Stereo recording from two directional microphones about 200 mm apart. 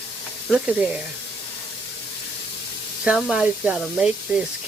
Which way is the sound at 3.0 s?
5° right (ahead or behind).